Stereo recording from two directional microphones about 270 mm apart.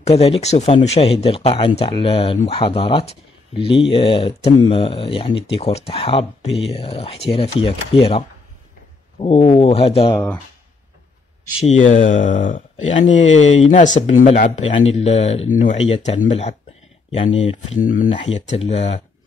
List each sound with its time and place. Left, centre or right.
0.0 s speech: left
9.2 s speech: left
11.6 s speech: left
13.0 s speech: left
13.7 s speech: left